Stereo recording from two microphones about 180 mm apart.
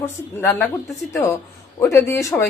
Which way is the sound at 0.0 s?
10° left (ahead or behind).